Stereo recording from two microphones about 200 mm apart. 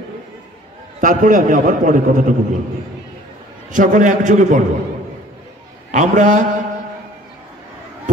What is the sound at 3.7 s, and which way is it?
Speech, 40° right (ahead or behind).